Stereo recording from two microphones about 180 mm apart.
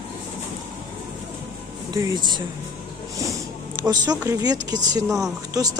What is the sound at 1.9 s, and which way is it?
Speech, 20° right (ahead or behind).